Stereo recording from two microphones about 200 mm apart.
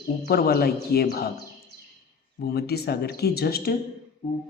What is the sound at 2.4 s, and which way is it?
Speech, 50° left (ahead or behind).